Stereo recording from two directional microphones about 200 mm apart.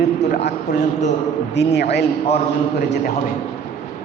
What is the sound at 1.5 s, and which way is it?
Speech, 55° left (ahead or behind).